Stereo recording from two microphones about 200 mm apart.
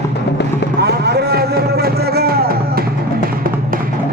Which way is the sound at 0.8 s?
55° right (ahead or behind).